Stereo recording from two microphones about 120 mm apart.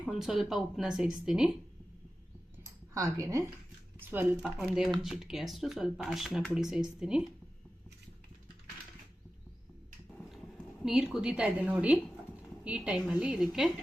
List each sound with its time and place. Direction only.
0.0 s speech: 5° right (ahead or behind)
2.9 s speech: 25° right (ahead or behind)
4.4 s speech: 5° right (ahead or behind)
10.8 s a woman's voice: 5° right (ahead or behind)